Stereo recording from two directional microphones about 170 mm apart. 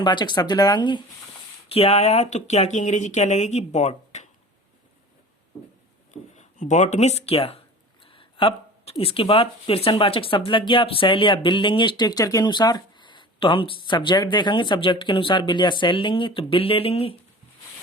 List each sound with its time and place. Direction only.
0.0 s speech: 25° left (ahead or behind); by 4.3 s 45° left (ahead or behind)
6.3 s speech: 45° left (ahead or behind)